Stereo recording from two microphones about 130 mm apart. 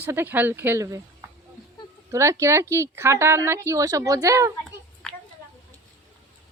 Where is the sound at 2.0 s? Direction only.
20° right (ahead or behind).